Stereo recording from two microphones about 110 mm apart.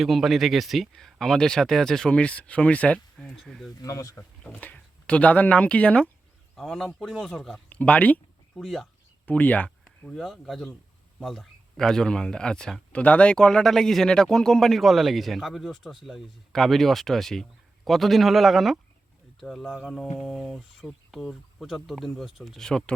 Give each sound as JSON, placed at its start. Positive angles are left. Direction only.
{"t": 0.0, "sound": "speech", "side_deg": 0}
{"t": 3.8, "sound": "speech", "side_deg": 30}
{"t": 4.4, "sound": "speech", "side_deg": 10}
{"t": 7.7, "sound": "a sound", "side_deg": 15}
{"t": 8.6, "sound": "speech", "side_deg": 0}
{"t": 9.2, "sound": "speech", "side_deg": 15}
{"t": 10.0, "sound": "speech", "side_deg": 5}